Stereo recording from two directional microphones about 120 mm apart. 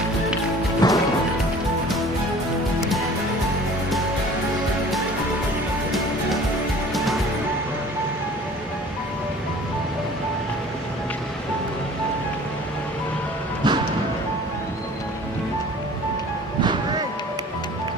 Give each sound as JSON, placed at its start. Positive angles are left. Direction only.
{"t": 0.8, "sound": "music", "side_deg": 35}
{"t": 2.8, "sound": "music", "side_deg": 0}
{"t": 13.6, "sound": "music", "side_deg": -40}